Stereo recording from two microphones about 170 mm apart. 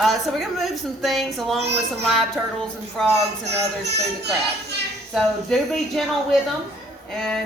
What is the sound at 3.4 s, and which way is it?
Speech, 80° right.